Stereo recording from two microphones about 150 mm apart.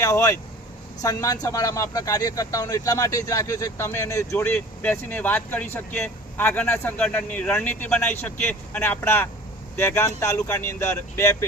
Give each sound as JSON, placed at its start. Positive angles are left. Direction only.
{"t": 0.0, "sound": "speech", "side_deg": 20}